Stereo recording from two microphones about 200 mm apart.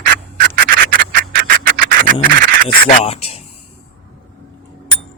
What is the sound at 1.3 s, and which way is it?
Music, 45° right (ahead or behind).